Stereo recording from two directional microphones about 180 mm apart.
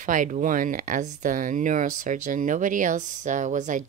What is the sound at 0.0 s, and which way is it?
Speech, 45° right (ahead or behind).